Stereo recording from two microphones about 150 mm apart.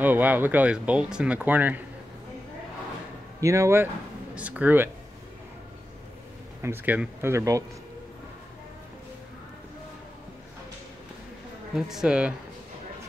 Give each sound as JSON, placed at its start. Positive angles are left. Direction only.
{"t": 0.0, "sound": "speech", "side_deg": -10}
{"t": 3.3, "sound": "speech", "side_deg": -20}
{"t": 6.6, "sound": "speech", "side_deg": -15}
{"t": 11.7, "sound": "speech", "side_deg": -5}